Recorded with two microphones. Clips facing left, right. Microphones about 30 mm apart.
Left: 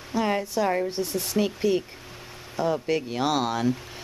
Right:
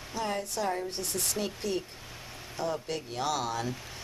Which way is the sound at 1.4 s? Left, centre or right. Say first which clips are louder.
Left 13 dB; left.